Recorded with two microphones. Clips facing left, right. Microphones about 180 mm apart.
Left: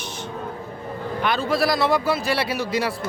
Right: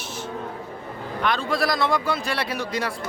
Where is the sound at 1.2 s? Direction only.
5° left (ahead or behind).